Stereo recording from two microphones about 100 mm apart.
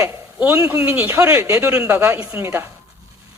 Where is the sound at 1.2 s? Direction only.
30° right (ahead or behind).